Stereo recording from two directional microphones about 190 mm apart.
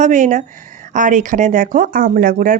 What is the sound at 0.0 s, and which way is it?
Speech, 40° right (ahead or behind).